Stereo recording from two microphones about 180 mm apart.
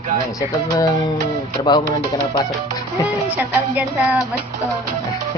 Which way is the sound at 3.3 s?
10° right (ahead or behind).